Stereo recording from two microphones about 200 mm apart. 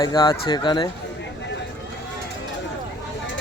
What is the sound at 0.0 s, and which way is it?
Speech, 20° left (ahead or behind).